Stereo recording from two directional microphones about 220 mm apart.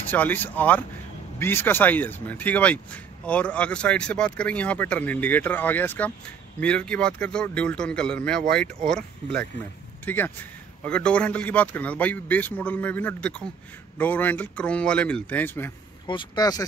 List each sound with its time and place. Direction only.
0.1 s a man's voice: 10° left (ahead or behind)
16.1 s speech: 20° left (ahead or behind)